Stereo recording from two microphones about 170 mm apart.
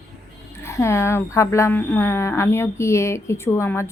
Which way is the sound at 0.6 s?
15° left (ahead or behind).